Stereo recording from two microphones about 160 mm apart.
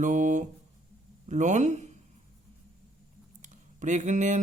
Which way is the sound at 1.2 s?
50° right (ahead or behind).